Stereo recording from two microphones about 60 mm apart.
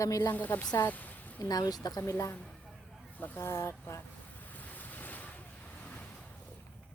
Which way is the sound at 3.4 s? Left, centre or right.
Left.